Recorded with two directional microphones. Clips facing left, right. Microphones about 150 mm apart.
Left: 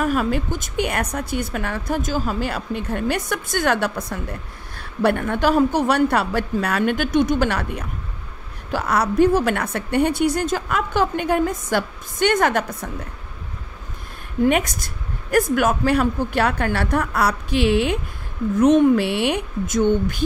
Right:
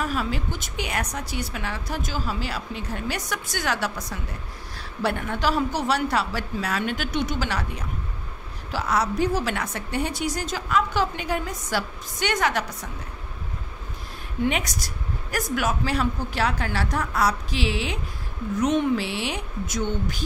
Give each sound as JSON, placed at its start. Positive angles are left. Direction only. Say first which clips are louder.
{"t": 0.0, "sound": "a woman's voice", "louder": "left 7 dB", "side_deg": 55}
{"t": 14.4, "sound": "a woman's voice", "louder": "left 7 dB", "side_deg": 50}